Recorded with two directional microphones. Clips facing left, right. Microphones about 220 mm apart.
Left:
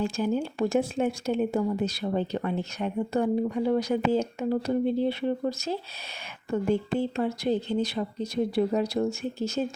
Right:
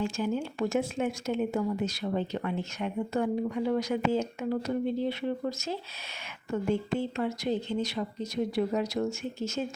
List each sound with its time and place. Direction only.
0.0 s speech: 35° left (ahead or behind)